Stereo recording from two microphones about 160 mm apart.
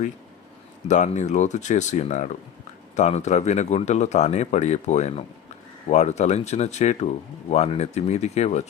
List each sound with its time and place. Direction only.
0.9 s a man's voice: 50° left (ahead or behind)